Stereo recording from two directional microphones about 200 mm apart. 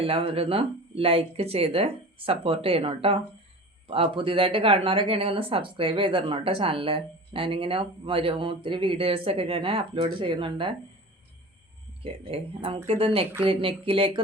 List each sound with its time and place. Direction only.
0.0 s speech: 30° right (ahead or behind)
12.0 s speech: 25° right (ahead or behind)